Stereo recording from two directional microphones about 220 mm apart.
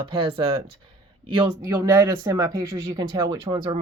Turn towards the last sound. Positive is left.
turn(degrees=-15)  # may be behind; listen again after turning